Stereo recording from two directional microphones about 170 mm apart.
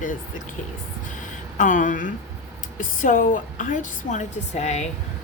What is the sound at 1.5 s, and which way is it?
Speech, 50° left (ahead or behind).